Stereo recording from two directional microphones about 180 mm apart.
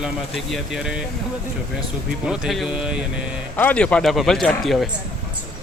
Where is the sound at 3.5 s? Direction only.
10° left (ahead or behind).